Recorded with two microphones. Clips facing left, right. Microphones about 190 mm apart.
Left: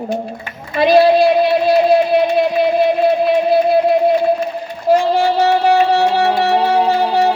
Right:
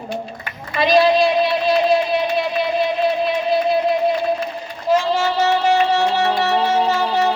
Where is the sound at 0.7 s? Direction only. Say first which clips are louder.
Left 4 dB; 55° left (ahead or behind).